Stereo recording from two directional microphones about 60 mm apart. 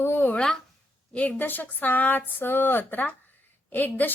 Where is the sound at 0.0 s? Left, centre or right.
Left.